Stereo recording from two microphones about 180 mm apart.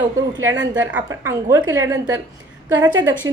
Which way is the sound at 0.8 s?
5° right (ahead or behind).